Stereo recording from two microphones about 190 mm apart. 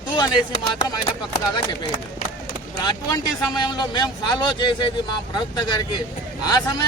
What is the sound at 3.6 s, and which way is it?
A man's voice, 20° left (ahead or behind).